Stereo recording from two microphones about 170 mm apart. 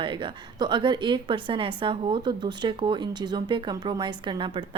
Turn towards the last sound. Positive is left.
turn(degrees=-30)  # may be behind; listen again after turning